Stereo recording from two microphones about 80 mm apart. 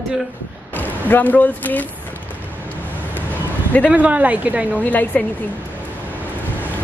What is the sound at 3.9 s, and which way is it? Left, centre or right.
Speech, centre.